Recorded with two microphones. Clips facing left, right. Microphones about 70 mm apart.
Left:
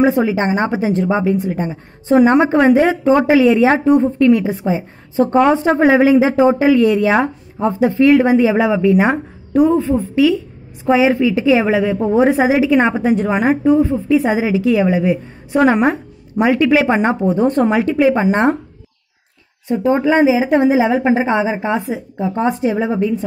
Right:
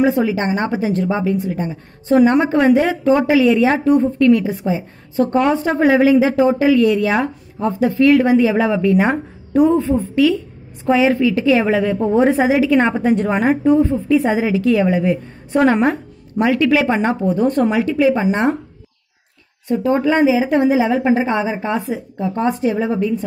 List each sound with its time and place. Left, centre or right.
0.0 s a woman's voice: left
9.1 s a woman's voice: centre
14.2 s a woman's voice: centre; by 18.6 s left
19.7 s a woman's voice: left